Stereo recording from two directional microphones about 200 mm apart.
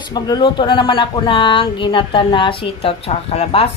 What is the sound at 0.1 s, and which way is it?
Speech, 20° left (ahead or behind).